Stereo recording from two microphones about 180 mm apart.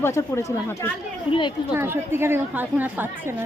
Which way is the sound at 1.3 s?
30° left (ahead or behind).